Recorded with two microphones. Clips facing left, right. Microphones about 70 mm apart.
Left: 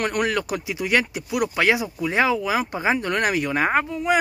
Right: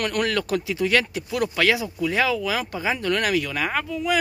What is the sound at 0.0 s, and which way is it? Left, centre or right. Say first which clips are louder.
Speech: left 1 dB; centre.